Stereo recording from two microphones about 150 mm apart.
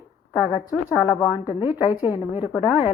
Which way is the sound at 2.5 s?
5° right (ahead or behind).